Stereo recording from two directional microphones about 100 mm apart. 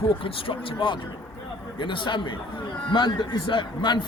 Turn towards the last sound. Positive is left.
turn(degrees=50)  # may be behind; listen again after turning